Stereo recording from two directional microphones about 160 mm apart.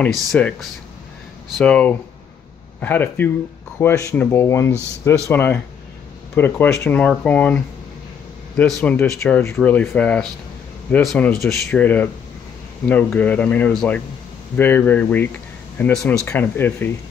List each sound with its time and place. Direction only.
0.3 s speech: 5° left (ahead or behind)